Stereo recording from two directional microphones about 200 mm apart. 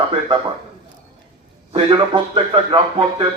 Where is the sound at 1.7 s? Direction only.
25° right (ahead or behind).